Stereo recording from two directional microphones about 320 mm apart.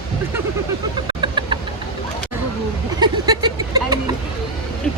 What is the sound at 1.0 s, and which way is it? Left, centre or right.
Vehicle, centre.